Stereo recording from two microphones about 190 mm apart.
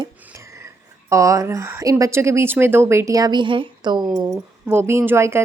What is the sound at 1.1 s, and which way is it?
Speech, 15° right (ahead or behind).